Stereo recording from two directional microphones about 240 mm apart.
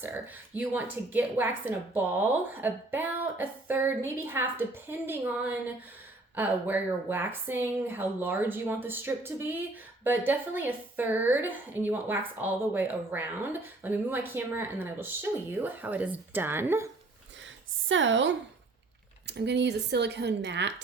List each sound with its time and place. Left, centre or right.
0.5 s a woman's voice: centre
17.8 s speech: right